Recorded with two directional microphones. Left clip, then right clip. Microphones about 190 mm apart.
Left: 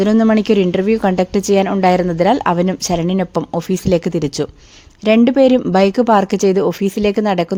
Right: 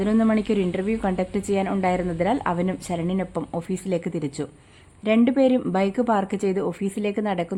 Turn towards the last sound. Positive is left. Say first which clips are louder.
# left 10 dB
turn(degrees=35)  # may be behind; listen again after turning